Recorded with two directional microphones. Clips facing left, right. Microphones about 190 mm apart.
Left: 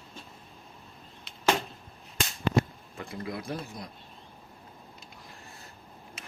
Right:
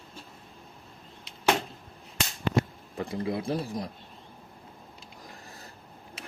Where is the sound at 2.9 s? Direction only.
30° right (ahead or behind).